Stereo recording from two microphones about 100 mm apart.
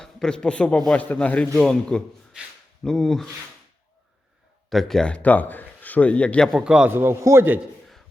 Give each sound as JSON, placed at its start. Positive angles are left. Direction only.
{"t": 0.0, "sound": "a man's voice", "side_deg": 5}
{"t": 4.7, "sound": "speech", "side_deg": 5}
{"t": 6.5, "sound": "a man's voice", "side_deg": -10}
{"t": 6.9, "sound": "a man's voice", "side_deg": -25}